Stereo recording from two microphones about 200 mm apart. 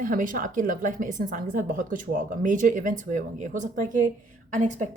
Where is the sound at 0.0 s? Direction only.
40° right (ahead or behind).